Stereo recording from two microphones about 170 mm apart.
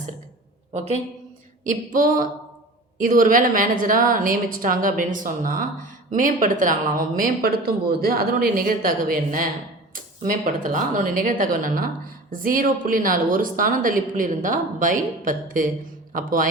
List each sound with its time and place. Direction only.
0.7 s a woman's voice: 40° right (ahead or behind)
1.6 s a woman's voice: 55° right (ahead or behind)